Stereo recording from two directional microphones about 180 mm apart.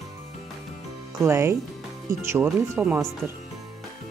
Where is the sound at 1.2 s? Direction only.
15° right (ahead or behind).